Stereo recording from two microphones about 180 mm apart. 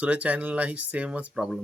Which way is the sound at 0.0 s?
5° right (ahead or behind).